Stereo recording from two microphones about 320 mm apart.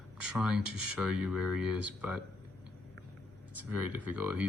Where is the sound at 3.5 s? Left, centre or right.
Right.